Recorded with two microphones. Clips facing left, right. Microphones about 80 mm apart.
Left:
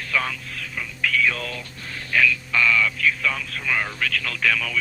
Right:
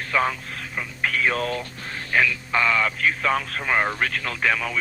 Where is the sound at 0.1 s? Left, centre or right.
Right.